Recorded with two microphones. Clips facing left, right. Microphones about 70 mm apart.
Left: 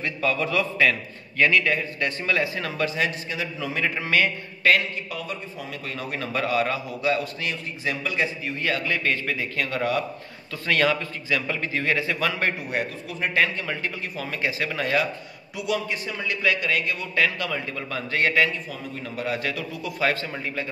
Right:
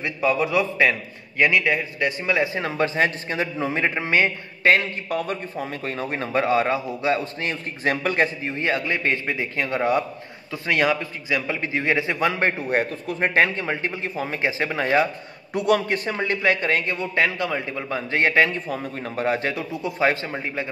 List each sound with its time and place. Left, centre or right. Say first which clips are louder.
0.0 s a man's voice: right 3 dB; centre
5.1 s a man's voice: right 7 dB; right
7.8 s a man's voice: right 5 dB; right
8.5 s a man's voice: right 2 dB; right
15.5 s a man's voice: right 7 dB; right